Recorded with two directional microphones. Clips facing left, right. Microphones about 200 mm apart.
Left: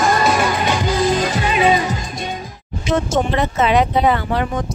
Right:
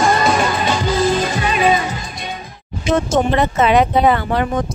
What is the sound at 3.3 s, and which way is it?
Speech, 55° right (ahead or behind).